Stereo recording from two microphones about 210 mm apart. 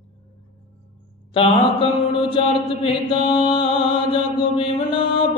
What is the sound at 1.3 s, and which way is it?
Mantra, 25° left (ahead or behind).